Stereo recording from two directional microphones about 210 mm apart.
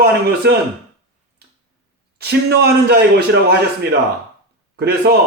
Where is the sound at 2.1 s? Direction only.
50° right (ahead or behind).